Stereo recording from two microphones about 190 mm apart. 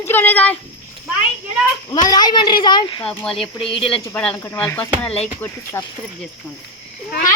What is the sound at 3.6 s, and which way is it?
Speech, 30° left (ahead or behind).